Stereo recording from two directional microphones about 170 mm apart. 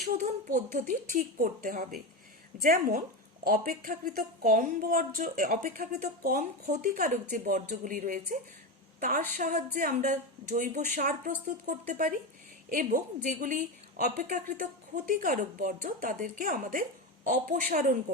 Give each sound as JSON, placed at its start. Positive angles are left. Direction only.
{"t": 0.2, "sound": "a woman's voice", "side_deg": -45}